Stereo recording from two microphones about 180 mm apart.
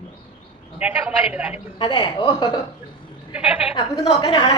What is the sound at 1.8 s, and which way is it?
Speech, 25° left (ahead or behind).